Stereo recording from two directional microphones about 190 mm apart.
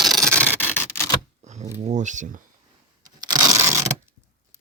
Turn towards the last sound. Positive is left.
turn(degrees=-20)  # may be behind; listen again after turning